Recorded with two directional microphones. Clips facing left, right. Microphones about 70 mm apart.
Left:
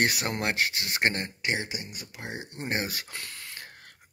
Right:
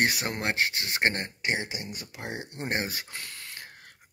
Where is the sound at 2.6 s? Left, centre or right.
Right.